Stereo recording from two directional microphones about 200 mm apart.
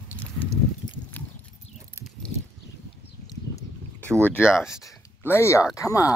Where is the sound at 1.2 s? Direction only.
10° left (ahead or behind).